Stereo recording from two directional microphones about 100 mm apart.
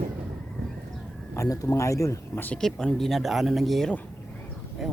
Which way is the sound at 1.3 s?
35° left (ahead or behind).